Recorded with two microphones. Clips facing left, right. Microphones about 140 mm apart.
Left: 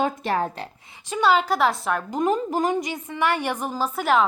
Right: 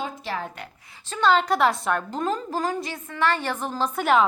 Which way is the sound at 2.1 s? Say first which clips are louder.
Left 4 dB; 15° left (ahead or behind).